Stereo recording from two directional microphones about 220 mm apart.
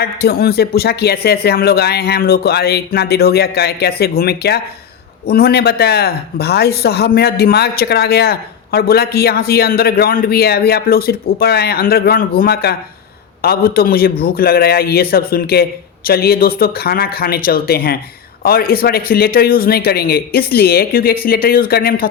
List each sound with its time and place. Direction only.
0.0 s speech: 45° left (ahead or behind)